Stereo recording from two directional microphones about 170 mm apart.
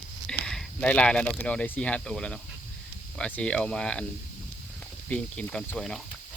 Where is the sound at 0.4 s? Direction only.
5° left (ahead or behind).